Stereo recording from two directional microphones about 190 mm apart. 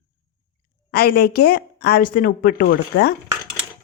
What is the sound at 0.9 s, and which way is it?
A woman's voice, 55° left (ahead or behind).